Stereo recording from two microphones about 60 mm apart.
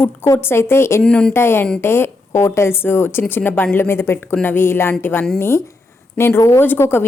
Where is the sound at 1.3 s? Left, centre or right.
Left.